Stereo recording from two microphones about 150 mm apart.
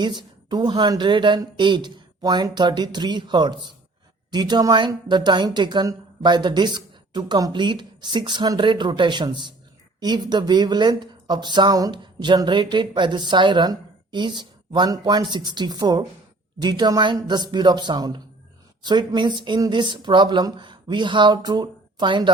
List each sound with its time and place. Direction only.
0.0 s speech: 30° right (ahead or behind)